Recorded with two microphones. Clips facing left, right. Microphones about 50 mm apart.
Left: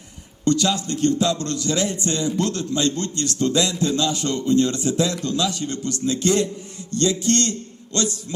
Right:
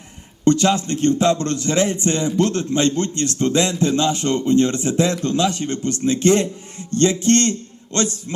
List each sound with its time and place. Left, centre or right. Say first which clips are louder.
0.4 s a man's voice: right 4 dB; right